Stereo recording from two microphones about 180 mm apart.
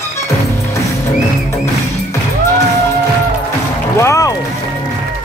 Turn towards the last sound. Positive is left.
turn(degrees=15)  # may be behind; listen again after turning